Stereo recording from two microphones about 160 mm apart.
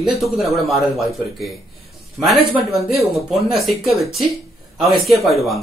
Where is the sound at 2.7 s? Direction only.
Centre (ahead or behind).